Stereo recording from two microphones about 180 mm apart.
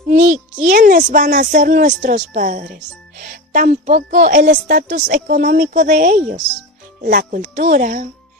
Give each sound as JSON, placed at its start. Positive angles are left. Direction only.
{"t": 0.1, "sound": "a woman's voice", "side_deg": -40}